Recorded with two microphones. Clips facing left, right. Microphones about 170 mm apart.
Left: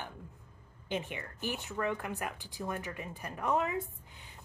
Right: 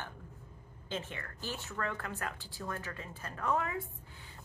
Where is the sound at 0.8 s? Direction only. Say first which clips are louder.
Left 3 dB; 15° left (ahead or behind).